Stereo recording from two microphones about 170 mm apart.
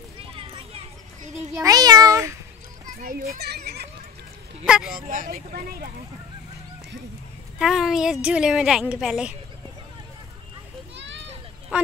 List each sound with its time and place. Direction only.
0.2 s a sound: 30° right (ahead or behind)
1.6 s meow: 20° right (ahead or behind)
2.9 s children playing: 55° right (ahead or behind)
3.3 s neigh: 75° right (ahead or behind)
4.6 s a woman's voice: 5° right (ahead or behind)
4.9 s speech: 55° right (ahead or behind)
7.5 s a woman's voice: centre (ahead or behind)
11.0 s a sound: 90° right
11.7 s speech: 5° right (ahead or behind)